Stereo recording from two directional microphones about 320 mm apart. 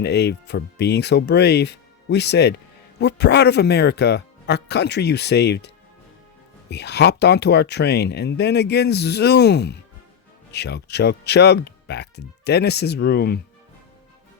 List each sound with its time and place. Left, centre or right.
0.0 s speech: left